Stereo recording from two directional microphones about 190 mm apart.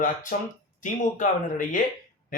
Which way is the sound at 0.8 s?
45° left (ahead or behind).